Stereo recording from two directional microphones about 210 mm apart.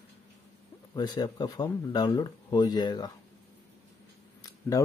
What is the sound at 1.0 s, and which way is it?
Speech, 20° left (ahead or behind).